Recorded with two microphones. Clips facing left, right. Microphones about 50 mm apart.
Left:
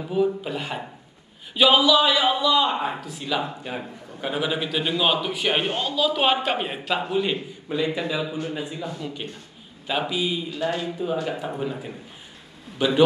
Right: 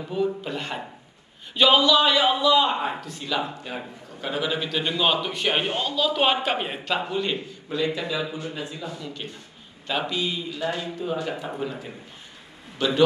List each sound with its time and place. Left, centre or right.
0.0 s a man's voice: centre